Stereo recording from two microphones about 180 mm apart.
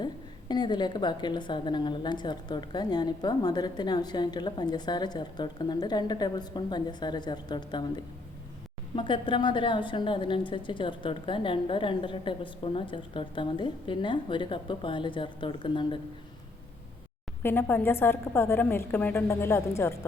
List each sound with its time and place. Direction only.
0.0 s a woman's voice: 25° left (ahead or behind)
9.0 s a woman's voice: 25° left (ahead or behind)
17.4 s a woman's voice: 10° left (ahead or behind)